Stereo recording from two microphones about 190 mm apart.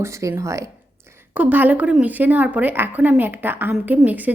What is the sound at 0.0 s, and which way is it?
A woman's voice, 15° right (ahead or behind).